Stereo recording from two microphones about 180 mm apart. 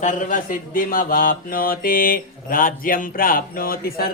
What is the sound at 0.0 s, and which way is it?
Speech, 45° left (ahead or behind).